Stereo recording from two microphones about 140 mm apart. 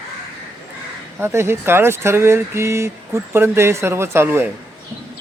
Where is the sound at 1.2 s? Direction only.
20° right (ahead or behind).